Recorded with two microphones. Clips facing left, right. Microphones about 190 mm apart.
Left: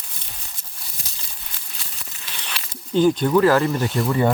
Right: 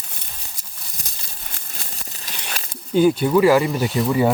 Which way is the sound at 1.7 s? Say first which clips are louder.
Right 4 dB; 40° right (ahead or behind).